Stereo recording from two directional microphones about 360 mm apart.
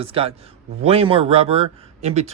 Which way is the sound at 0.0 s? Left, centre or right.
Centre.